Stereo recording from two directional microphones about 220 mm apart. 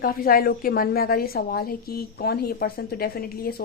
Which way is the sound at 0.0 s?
40° left (ahead or behind).